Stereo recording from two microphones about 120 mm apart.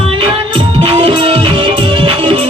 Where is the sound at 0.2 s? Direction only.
45° right (ahead or behind).